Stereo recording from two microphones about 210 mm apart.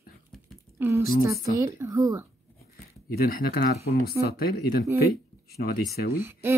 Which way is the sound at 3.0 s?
45° left (ahead or behind).